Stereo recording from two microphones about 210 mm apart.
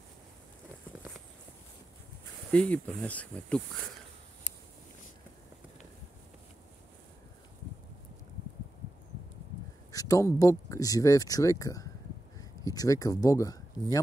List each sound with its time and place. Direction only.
2.5 s speech: 5° left (ahead or behind)
9.8 s a sound: 15° left (ahead or behind)
10.7 s speech: 15° left (ahead or behind)